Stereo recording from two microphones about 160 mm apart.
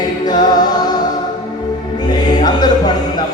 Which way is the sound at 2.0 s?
25° left (ahead or behind).